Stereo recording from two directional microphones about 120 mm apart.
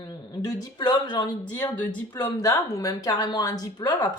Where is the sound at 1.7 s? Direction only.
15° left (ahead or behind).